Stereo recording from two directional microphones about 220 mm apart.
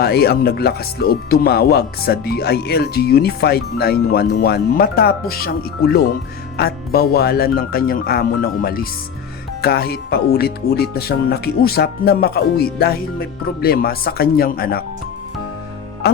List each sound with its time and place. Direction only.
0.0 s speech: 45° left (ahead or behind)